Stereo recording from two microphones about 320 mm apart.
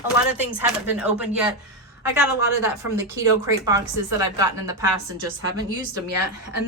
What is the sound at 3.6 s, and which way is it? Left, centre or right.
A woman's voice, centre.